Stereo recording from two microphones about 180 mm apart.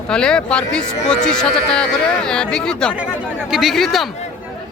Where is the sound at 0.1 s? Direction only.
5° left (ahead or behind).